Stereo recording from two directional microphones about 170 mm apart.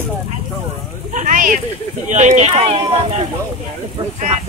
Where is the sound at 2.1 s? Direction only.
45° right (ahead or behind).